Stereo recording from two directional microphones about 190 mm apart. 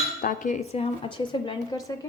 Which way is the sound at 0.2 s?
45° left (ahead or behind).